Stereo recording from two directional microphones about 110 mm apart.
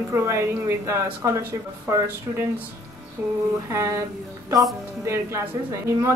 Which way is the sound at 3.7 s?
25° right (ahead or behind).